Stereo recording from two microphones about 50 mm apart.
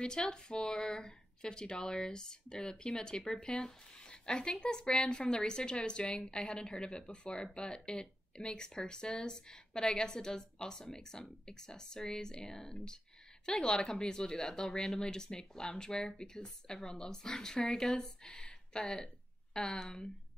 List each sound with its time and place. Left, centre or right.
0.0 s speech: centre
15.0 s speech: centre